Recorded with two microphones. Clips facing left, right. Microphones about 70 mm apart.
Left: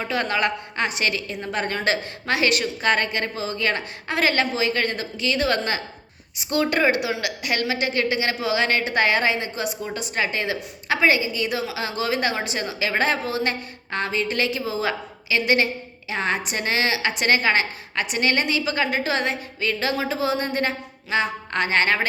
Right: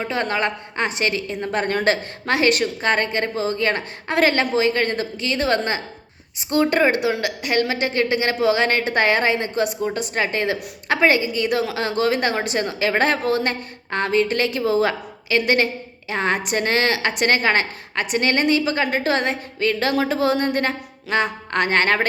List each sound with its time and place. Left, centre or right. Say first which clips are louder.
0.0 s a woman's voice: right 1 dB; right